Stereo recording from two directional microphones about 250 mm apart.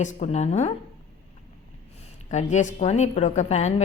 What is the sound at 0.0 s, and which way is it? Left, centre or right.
Speech, left.